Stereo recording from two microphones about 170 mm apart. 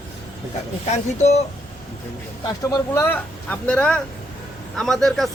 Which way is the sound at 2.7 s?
15° left (ahead or behind).